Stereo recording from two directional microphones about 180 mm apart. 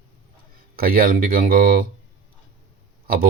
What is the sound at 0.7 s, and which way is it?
Speech, 55° right (ahead or behind).